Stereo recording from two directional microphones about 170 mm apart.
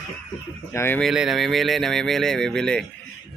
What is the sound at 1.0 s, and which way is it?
Speech, centre (ahead or behind).